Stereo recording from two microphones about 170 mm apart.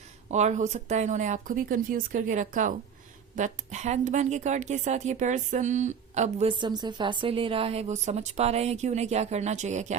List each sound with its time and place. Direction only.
0.3 s a woman's voice: 45° right (ahead or behind)
6.6 s a woman's voice: 25° right (ahead or behind); by 10.0 s 45° right (ahead or behind)